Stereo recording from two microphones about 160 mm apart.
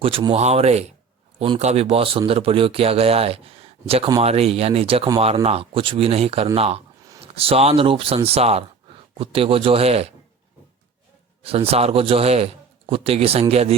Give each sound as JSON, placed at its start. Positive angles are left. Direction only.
{"t": 0.0, "sound": "speech", "side_deg": -30}
{"t": 11.4, "sound": "speech", "side_deg": -40}